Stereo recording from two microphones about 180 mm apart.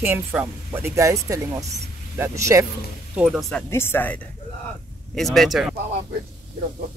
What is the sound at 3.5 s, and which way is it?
Speech, 10° left (ahead or behind).